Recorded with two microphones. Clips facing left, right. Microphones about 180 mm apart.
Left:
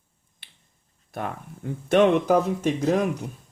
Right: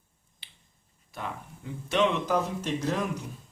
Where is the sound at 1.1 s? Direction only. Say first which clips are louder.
Left 6 dB; 55° left (ahead or behind).